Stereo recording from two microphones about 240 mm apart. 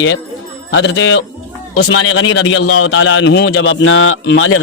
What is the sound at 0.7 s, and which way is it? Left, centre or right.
A man's voice, left.